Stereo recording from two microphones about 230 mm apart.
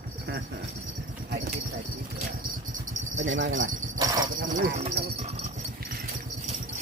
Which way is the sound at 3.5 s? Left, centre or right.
Right.